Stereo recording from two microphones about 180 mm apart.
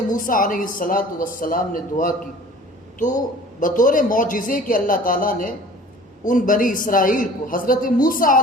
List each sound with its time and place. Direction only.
0.1 s a woman's voice: 50° left (ahead or behind)
3.6 s a woman's voice: 50° left (ahead or behind)